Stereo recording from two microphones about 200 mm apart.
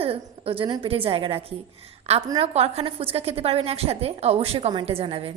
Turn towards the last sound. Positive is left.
turn(degrees=-30)  # may be behind; listen again after turning